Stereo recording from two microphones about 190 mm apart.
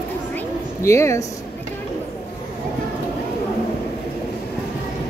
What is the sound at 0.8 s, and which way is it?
Speech, 15° left (ahead or behind).